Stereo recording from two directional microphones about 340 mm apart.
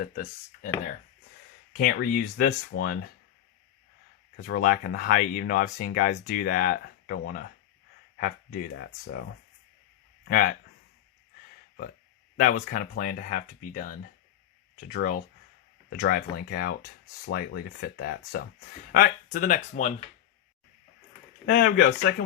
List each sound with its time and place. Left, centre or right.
0.0 s speech: left
1.8 s speech: left
4.4 s speech: left
10.2 s speech: left
12.4 s speech: left
21.4 s speech: left